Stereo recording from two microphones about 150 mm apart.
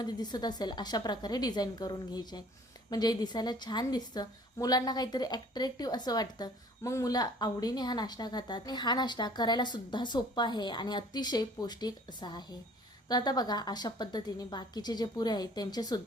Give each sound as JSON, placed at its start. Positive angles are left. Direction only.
{"t": 0.0, "sound": "a woman's voice", "side_deg": 30}